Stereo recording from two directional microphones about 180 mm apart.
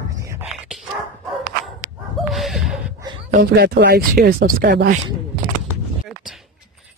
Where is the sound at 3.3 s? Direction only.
65° right (ahead or behind).